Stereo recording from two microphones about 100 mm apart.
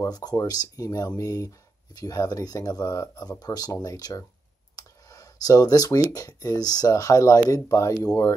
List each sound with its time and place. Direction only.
0.0 s speech: 40° left (ahead or behind)
4.7 s clicking: 35° left (ahead or behind)
6.1 s speech: 35° left (ahead or behind)